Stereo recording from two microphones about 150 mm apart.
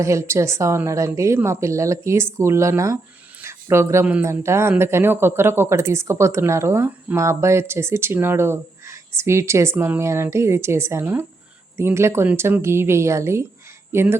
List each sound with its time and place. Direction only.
0.0 s a woman's voice: 20° right (ahead or behind)